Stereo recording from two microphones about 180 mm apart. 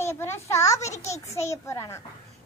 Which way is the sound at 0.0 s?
15° left (ahead or behind).